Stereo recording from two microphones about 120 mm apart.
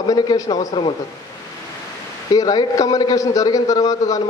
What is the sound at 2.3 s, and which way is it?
A man's voice, 35° left (ahead or behind).